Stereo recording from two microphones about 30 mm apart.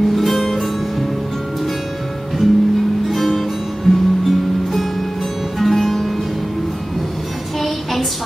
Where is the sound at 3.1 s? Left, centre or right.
Centre.